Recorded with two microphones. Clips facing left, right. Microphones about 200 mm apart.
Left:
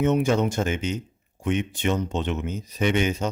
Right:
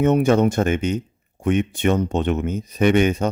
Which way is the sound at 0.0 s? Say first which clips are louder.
Right 5 dB; 60° right (ahead or behind).